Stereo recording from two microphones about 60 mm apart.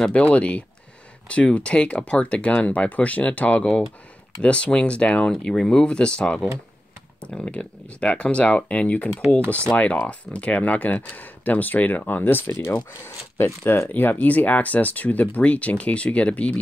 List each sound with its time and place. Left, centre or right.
0.1 s speech: left